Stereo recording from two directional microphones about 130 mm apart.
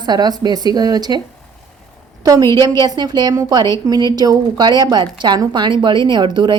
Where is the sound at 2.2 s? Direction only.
30° right (ahead or behind).